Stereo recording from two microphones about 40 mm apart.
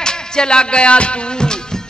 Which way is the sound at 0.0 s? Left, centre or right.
Left.